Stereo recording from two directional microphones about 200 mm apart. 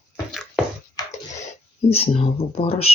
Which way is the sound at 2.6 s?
30° left (ahead or behind).